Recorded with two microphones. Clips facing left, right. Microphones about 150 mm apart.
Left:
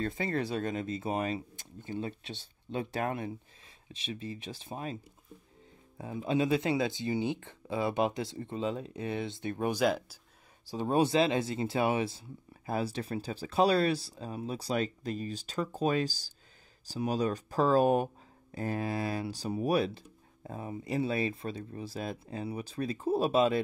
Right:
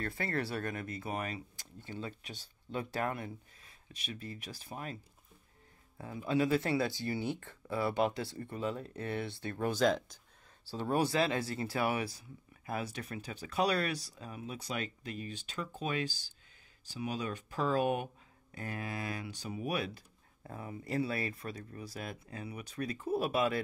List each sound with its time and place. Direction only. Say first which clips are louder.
0.0 s speech: left 4 dB; 20° left (ahead or behind)
5.9 s speech: left 2 dB; 20° left (ahead or behind)